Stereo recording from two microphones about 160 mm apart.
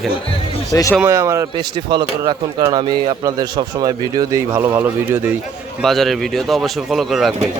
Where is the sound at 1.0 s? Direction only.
20° right (ahead or behind).